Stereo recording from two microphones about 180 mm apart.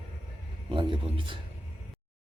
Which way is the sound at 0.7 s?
30° right (ahead or behind).